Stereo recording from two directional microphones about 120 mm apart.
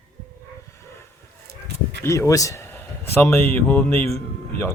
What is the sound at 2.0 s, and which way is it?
A man's voice, 25° left (ahead or behind).